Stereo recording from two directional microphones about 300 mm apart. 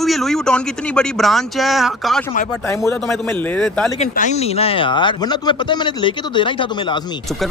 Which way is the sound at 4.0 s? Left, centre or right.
Left.